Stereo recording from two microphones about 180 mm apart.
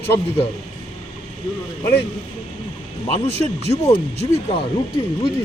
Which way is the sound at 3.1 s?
35° left (ahead or behind).